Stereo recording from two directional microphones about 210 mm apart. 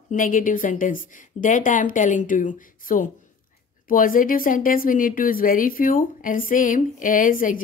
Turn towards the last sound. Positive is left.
turn(degrees=40)  # may be behind; listen again after turning